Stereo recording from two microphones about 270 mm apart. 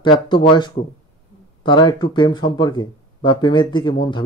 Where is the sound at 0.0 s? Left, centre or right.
Centre.